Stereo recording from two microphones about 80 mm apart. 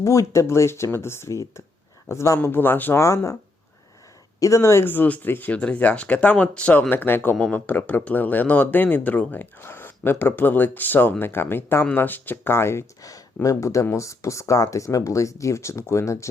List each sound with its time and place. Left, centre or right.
0.0 s speech: left
2.4 s speech: left
3.0 s speech: left
4.4 s speech: left
13.0 s speech: left